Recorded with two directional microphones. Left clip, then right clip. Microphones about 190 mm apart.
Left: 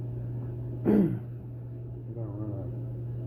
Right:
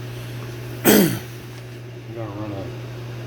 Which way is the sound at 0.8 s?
90° right.